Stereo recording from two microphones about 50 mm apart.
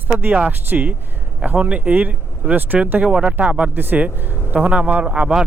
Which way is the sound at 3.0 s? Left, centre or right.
Right.